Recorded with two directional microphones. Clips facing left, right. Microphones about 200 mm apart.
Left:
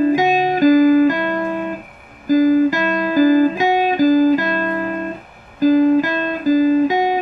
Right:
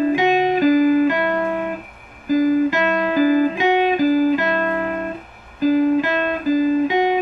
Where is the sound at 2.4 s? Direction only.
40° left (ahead or behind).